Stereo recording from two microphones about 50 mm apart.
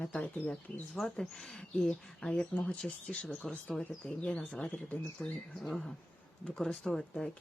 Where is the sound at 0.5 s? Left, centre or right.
Centre.